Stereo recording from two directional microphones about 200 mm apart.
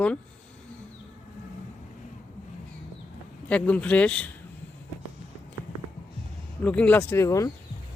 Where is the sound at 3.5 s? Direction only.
5° left (ahead or behind).